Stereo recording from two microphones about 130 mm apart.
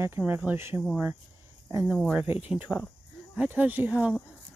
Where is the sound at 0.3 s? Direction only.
15° right (ahead or behind).